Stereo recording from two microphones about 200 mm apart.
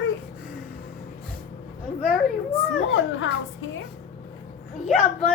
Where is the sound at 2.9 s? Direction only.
75° left (ahead or behind).